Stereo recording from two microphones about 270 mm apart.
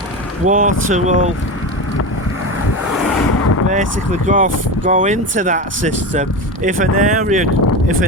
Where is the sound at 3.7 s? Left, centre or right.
Right.